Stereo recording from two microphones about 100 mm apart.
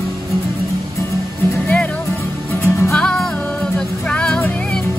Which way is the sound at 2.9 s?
5° left (ahead or behind).